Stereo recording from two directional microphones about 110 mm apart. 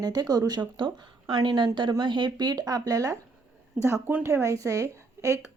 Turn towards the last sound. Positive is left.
turn(degrees=-30)  # may be behind; listen again after turning